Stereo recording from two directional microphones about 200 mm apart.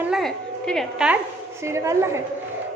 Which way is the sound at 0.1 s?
Centre (ahead or behind).